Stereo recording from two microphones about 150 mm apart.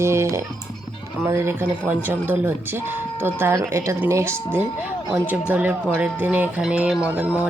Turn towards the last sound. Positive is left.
turn(degrees=-10)  # may be behind; listen again after turning